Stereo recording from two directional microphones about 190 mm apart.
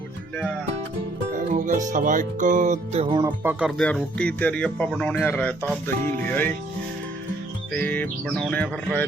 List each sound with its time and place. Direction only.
1.3 s speech: 40° right (ahead or behind)
3.2 s speech: 20° right (ahead or behind)
3.6 s speech: centre (ahead or behind)
7.7 s speech: 10° left (ahead or behind)